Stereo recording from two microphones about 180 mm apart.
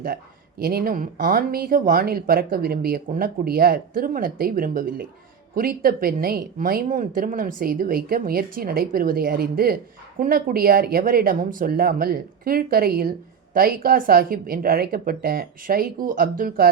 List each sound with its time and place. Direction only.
0.6 s speech: 55° right (ahead or behind)